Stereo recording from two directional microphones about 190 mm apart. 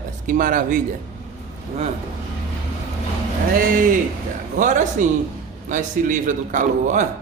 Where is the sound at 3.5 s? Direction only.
45° right (ahead or behind).